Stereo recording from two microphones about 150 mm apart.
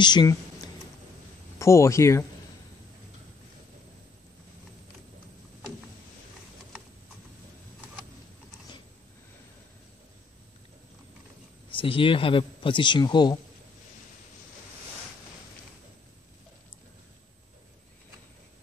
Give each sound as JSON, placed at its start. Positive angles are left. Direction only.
{"t": 0.0, "sound": "speech", "side_deg": 30}
{"t": 11.7, "sound": "speech", "side_deg": 35}